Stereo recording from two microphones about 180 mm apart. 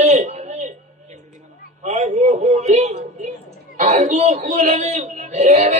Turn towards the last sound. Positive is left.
turn(degrees=-40)  # may be behind; listen again after turning